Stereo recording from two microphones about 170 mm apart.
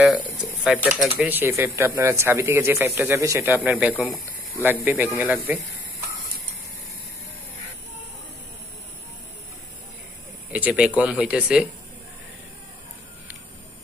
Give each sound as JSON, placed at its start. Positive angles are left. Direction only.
{"t": 0.7, "sound": "speech", "side_deg": 0}
{"t": 1.1, "sound": "speech", "side_deg": -10}
{"t": 10.5, "sound": "speech", "side_deg": -10}